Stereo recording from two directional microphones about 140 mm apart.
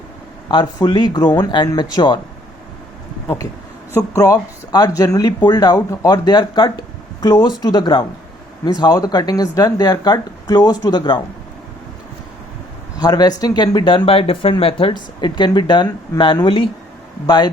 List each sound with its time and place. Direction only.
0.4 s speech: 30° left (ahead or behind)
3.9 s speech: 25° left (ahead or behind)
13.0 s speech: 30° left (ahead or behind)